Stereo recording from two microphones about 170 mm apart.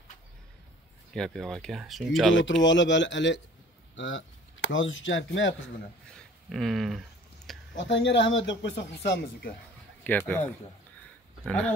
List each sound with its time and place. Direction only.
1.1 s speech: 5° left (ahead or behind)
2.3 s speech: 90° left
6.0 s a sound: centre (ahead or behind)
7.7 s speech: 90° left
9.1 s speech: 65° left (ahead or behind)
10.0 s speech: 10° left (ahead or behind)
11.4 s speech: 5° left (ahead or behind)